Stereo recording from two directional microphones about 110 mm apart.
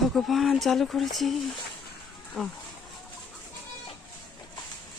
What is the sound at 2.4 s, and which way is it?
Speech, 10° left (ahead or behind).